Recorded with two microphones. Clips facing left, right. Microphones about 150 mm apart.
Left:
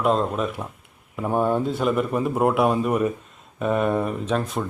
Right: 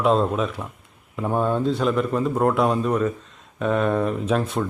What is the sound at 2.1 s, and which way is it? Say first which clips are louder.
Speech: even; 15° left (ahead or behind).